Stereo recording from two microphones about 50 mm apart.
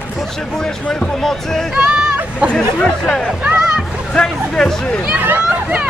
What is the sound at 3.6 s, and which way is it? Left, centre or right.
Music, centre.